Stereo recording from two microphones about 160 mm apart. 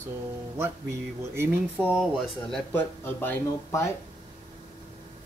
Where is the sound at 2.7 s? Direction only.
15° left (ahead or behind).